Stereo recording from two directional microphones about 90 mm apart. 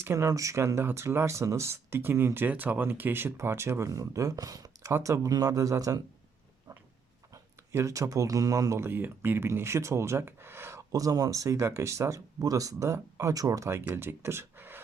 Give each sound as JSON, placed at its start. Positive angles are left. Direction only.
{"t": 0.0, "sound": "speech", "side_deg": -30}
{"t": 4.9, "sound": "speech", "side_deg": -30}
{"t": 7.7, "sound": "speech", "side_deg": -30}